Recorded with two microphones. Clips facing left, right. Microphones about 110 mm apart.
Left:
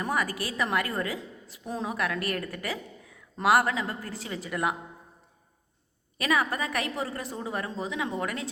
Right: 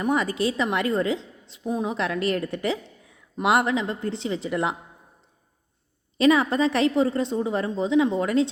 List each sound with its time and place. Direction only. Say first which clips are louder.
0.0 s a woman's voice: right 6 dB; 25° right (ahead or behind)
6.1 s a woman's voice: right 8 dB; 25° right (ahead or behind)